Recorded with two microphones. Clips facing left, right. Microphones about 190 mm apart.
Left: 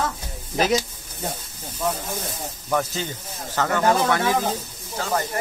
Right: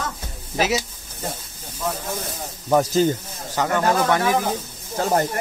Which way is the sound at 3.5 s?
15° right (ahead or behind).